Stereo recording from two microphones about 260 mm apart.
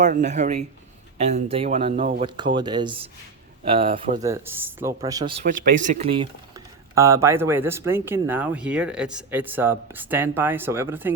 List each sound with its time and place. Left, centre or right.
0.0 s speech: right
6.0 s speech: centre